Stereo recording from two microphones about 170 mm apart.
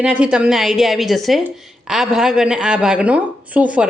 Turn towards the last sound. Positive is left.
turn(degrees=-10)  # may be behind; listen again after turning